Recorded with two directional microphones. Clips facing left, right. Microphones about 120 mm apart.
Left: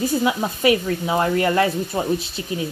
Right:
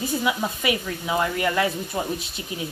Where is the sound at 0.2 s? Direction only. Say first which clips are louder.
Left 5 dB; 35° left (ahead or behind).